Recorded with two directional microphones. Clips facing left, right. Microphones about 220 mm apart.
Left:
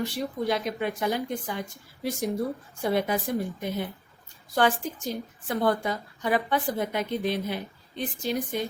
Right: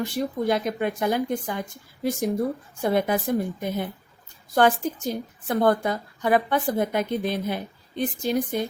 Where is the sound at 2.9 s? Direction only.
50° right (ahead or behind).